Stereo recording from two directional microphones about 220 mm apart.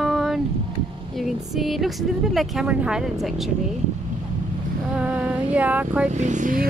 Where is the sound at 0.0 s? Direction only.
Centre (ahead or behind).